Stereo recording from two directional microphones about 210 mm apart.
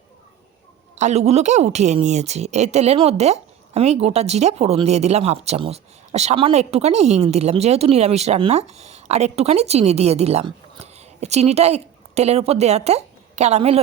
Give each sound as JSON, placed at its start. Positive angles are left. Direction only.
{"t": 0.9, "sound": "a woman's voice", "side_deg": -35}